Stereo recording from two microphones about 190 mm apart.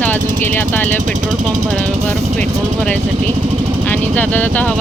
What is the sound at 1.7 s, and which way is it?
Speech, 5° left (ahead or behind).